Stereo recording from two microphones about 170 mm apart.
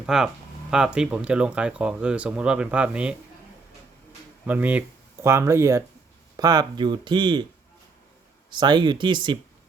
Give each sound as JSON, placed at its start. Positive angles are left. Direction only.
{"t": 0.0, "sound": "speech", "side_deg": -5}
{"t": 4.4, "sound": "speech", "side_deg": -10}
{"t": 8.4, "sound": "speech", "side_deg": -25}